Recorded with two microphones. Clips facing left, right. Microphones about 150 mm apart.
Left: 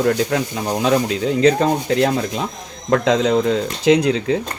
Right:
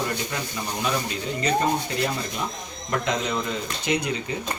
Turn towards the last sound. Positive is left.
turn(degrees=90)